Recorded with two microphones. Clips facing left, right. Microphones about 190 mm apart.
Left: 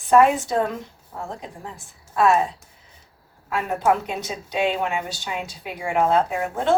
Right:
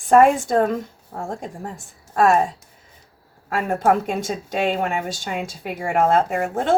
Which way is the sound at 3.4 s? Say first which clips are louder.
Right 2 dB; 50° right (ahead or behind).